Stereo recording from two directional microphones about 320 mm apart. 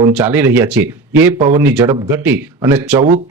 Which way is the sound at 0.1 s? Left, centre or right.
Centre.